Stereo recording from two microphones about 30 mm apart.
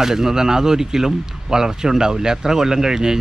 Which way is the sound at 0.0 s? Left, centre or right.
Centre.